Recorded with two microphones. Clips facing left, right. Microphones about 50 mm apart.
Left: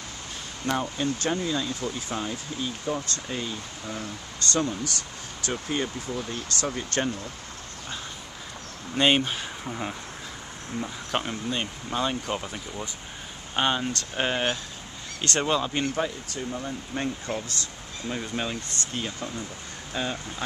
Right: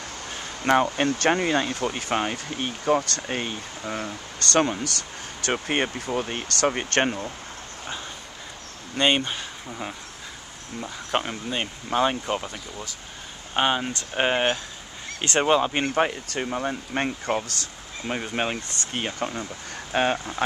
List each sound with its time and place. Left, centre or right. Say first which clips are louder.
0.7 s speech: right 7 dB; right
8.9 s speech: even; centre
11.1 s speech: right 3 dB; centre
13.6 s speech: right 2 dB; centre; by 16.0 s right
16.0 s speech: right 5 dB; right